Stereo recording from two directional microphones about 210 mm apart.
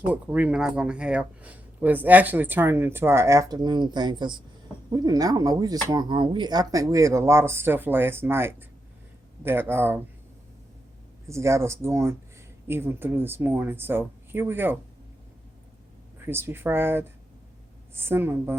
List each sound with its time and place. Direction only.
0.1 s speech: 5° right (ahead or behind)
11.3 s speech: 15° right (ahead or behind)
16.2 s speech: 10° right (ahead or behind)